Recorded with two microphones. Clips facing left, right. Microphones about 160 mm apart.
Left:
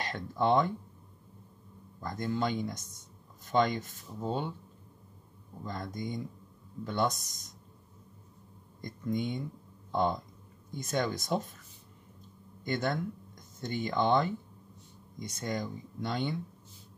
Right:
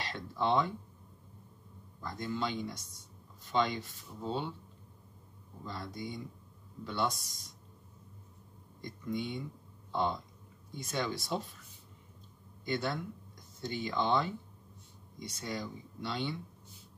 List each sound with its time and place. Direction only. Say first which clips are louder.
0.0 s speech: left 4 dB; 50° left (ahead or behind)
2.0 s speech: left 4 dB; 45° left (ahead or behind)
5.7 s speech: left 4 dB; 45° left (ahead or behind)
8.8 s speech: left 4 dB; 45° left (ahead or behind)
12.6 s speech: left 3 dB; 45° left (ahead or behind)